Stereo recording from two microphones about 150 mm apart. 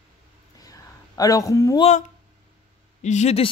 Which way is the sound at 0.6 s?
25° left (ahead or behind).